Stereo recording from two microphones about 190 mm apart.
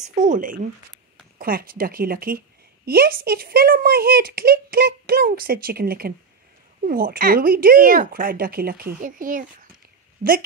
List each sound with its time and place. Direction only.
0.0 s a woman's voice: 40° right (ahead or behind)